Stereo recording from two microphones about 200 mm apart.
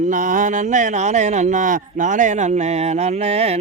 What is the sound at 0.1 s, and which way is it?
Speech, 40° right (ahead or behind).